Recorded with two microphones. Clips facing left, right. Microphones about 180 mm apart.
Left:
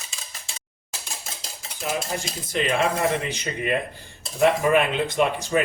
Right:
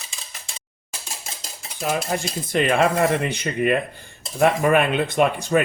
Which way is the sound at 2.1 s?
60° right (ahead or behind).